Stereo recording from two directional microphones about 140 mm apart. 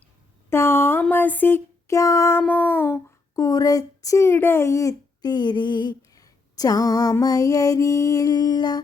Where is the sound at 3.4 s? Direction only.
25° left (ahead or behind).